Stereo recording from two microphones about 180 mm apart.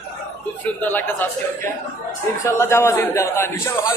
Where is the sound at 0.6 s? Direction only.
10° left (ahead or behind).